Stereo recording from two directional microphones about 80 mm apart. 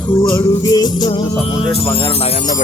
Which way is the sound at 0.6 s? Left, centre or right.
Left.